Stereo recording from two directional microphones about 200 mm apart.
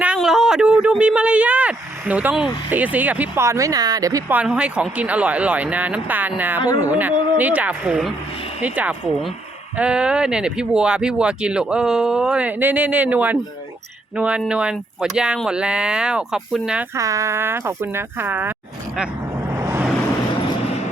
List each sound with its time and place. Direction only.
0.0 s speech: 5° right (ahead or behind)
16.9 s speech: 15° right (ahead or behind)
19.5 s vehicle: 10° right (ahead or behind)